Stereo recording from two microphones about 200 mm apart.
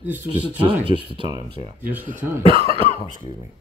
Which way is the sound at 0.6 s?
25° right (ahead or behind).